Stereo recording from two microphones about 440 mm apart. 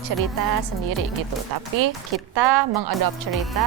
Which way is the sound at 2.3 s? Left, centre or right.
Right.